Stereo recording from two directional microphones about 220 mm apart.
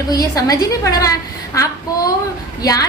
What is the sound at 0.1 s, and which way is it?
A woman's voice, 15° left (ahead or behind).